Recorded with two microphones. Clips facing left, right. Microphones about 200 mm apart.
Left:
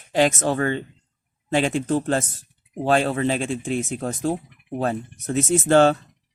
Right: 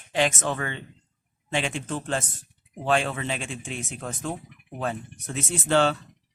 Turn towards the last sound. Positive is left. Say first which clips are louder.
# left 7 dB
turn(degrees=45)  # may be behind; listen again after turning